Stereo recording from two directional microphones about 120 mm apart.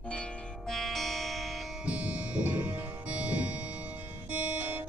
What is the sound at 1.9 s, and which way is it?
Music, 10° right (ahead or behind).